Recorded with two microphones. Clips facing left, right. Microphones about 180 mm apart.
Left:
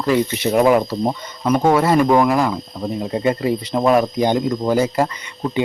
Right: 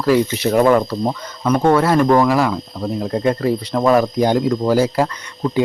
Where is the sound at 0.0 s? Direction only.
Centre (ahead or behind).